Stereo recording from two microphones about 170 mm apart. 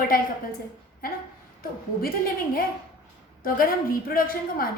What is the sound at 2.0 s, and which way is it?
A woman's voice, 60° left (ahead or behind).